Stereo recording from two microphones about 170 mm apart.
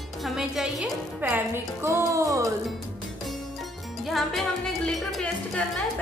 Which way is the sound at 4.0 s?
Centre (ahead or behind).